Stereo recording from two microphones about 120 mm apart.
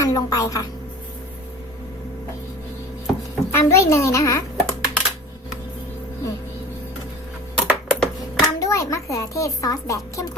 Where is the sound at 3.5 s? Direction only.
25° left (ahead or behind).